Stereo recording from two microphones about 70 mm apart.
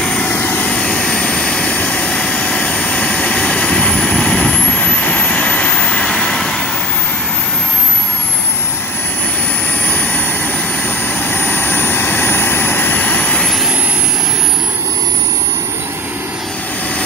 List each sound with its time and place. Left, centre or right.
0.0 s vehicle: centre
9.8 s vehicle: centre